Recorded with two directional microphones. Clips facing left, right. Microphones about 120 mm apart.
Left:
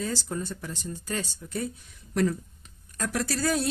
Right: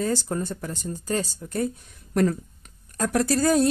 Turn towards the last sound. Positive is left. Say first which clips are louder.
# right 7 dB
turn(degrees=-45)  # may be behind; listen again after turning